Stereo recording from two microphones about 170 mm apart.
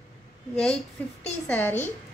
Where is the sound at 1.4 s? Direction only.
10° left (ahead or behind).